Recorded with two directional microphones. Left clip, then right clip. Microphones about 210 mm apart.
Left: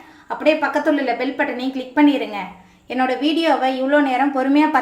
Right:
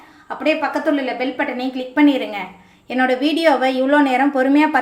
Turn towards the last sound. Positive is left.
turn(degrees=-10)  # may be behind; listen again after turning